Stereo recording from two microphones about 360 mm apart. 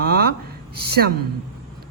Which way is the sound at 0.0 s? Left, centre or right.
Right.